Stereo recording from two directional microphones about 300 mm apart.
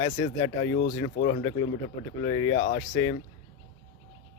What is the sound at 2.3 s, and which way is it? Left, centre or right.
Speech, centre.